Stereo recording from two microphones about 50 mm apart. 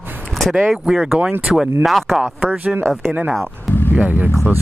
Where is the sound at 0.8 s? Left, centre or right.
Centre.